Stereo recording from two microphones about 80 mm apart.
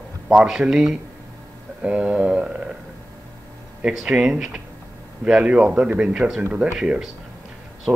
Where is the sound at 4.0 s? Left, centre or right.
Centre.